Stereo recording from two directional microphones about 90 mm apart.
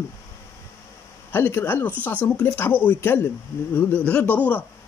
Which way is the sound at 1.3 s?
25° left (ahead or behind).